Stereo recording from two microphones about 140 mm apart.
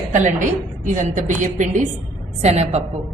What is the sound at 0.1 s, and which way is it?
A woman's voice, 65° right (ahead or behind).